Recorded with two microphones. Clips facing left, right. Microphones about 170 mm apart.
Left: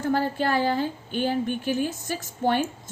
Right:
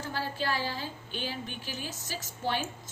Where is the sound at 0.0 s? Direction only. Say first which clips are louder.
Left 10 dB; 50° left (ahead or behind).